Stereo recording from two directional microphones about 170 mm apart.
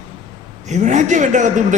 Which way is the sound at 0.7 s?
45° right (ahead or behind).